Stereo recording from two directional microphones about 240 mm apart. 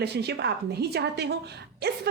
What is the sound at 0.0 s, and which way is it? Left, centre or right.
A woman's voice, right.